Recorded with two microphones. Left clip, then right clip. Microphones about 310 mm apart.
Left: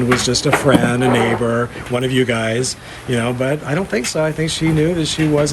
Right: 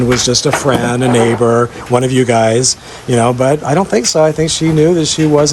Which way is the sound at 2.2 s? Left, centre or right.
Right.